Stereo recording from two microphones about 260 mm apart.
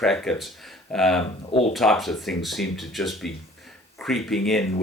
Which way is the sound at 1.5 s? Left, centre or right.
Left.